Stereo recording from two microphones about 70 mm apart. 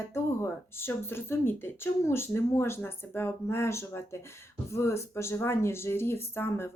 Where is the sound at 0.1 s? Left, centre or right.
Left.